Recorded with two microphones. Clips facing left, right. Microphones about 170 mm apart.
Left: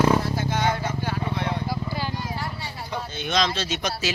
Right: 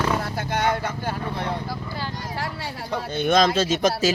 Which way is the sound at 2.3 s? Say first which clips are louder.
Right 2 dB; 90° right.